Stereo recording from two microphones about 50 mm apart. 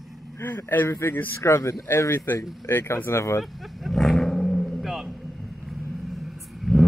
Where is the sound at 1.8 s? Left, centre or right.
Left.